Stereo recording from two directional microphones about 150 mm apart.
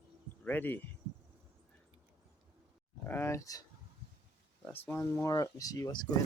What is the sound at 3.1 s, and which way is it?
Speech, 15° left (ahead or behind).